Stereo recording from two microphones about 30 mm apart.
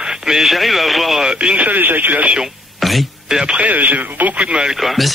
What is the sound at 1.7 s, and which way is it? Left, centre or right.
Speech, right.